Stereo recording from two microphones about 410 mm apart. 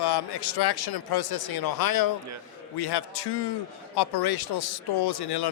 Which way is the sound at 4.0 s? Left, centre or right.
Left.